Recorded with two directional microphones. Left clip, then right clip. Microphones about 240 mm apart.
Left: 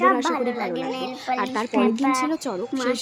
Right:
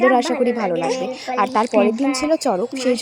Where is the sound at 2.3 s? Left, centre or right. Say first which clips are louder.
Right 8 dB; right.